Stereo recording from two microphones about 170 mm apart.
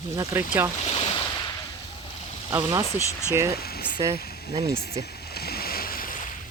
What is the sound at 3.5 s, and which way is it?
Speech, 65° left (ahead or behind).